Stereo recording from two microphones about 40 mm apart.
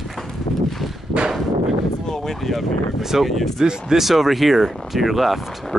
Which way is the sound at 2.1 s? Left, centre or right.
Centre.